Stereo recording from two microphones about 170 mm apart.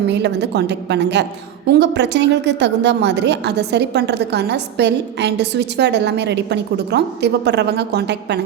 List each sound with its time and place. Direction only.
0.1 s a woman's voice: 90° right